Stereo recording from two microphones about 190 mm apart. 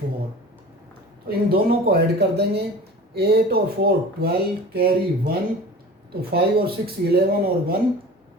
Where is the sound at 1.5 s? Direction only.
55° right (ahead or behind).